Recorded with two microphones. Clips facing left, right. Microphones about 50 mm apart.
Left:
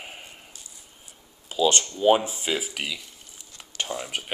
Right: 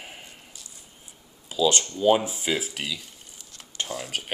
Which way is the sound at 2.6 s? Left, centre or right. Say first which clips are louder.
Left 1 dB; left.